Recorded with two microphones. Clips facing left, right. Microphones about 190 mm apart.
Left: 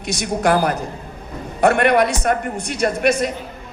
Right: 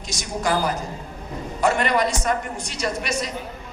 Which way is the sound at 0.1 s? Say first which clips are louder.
Left 6 dB; 60° left (ahead or behind).